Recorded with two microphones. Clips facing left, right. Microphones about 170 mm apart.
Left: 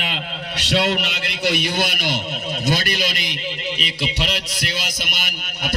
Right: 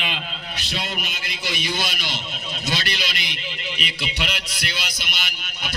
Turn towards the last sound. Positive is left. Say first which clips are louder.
# left 6 dB
turn(degrees=50)  # may be behind; listen again after turning